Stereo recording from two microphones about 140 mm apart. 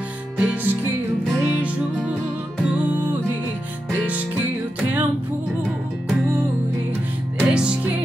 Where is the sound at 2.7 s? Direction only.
10° right (ahead or behind).